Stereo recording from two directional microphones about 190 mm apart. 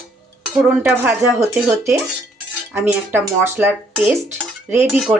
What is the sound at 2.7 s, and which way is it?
Speech, 10° right (ahead or behind).